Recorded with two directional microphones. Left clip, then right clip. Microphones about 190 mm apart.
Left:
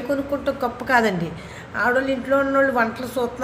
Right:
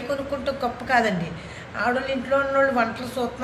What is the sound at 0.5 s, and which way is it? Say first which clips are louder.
A woman's voice: left 2 dB; 50° left (ahead or behind).